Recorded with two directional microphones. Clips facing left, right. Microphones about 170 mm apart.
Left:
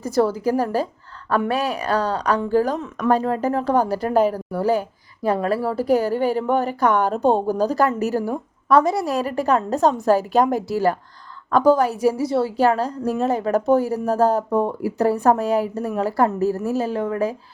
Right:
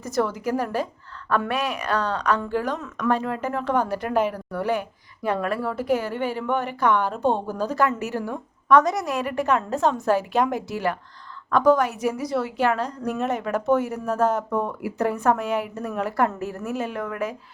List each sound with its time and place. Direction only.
0.0 s speech: 30° left (ahead or behind)